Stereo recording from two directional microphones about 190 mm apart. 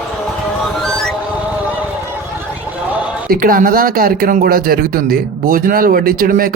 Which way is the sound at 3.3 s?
45° right (ahead or behind).